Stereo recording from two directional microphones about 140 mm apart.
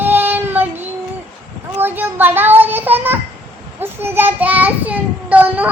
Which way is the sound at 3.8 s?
15° right (ahead or behind).